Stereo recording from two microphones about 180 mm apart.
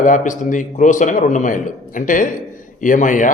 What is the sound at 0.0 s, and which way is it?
A man's voice, 45° left (ahead or behind).